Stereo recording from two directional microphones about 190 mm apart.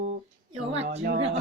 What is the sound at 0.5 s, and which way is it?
Speech, 35° right (ahead or behind).